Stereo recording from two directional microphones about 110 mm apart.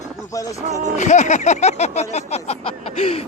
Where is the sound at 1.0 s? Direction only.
90° left.